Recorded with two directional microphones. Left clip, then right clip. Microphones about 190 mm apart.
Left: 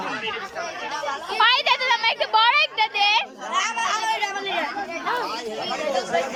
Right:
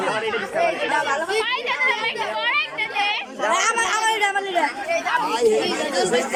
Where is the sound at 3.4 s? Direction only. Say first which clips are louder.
Right 4 dB; 50° right (ahead or behind).